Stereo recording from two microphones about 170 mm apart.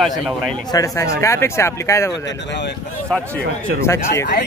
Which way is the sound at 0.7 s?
20° left (ahead or behind).